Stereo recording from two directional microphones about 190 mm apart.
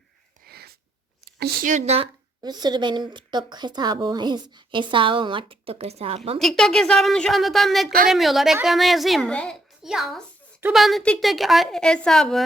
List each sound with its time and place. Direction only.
0.4 s sneeze: 55° right (ahead or behind)
1.2 s speech: 55° right (ahead or behind); by 2.0 s 35° right (ahead or behind)
2.4 s a woman's voice: 20° right (ahead or behind)
6.4 s a woman's voice: centre (ahead or behind)
7.9 s a woman's voice: 50° right (ahead or behind)
8.1 s a woman's voice: centre (ahead or behind)